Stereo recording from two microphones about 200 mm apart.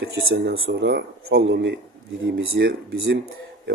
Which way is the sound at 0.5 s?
60° right (ahead or behind).